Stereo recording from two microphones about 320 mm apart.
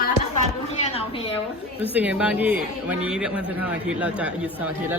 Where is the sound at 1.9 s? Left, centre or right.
Centre.